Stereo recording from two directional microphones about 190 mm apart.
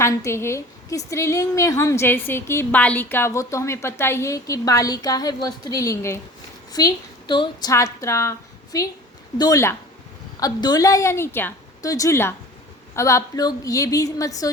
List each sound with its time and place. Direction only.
0.0 s a woman's voice: 15° left (ahead or behind)